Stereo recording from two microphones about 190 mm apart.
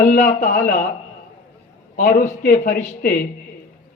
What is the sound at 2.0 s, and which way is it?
Speech, 45° left (ahead or behind).